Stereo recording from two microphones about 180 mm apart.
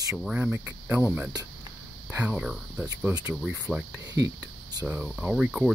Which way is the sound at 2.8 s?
20° right (ahead or behind).